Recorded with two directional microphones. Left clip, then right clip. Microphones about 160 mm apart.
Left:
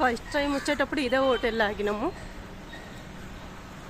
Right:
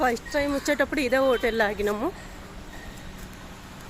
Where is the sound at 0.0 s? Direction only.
5° right (ahead or behind).